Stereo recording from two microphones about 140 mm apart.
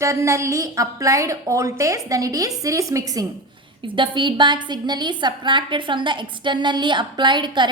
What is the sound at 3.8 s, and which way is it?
A woman's voice, 35° right (ahead or behind).